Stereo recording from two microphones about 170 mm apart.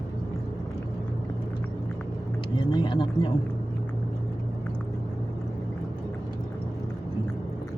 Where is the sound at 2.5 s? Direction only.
30° left (ahead or behind).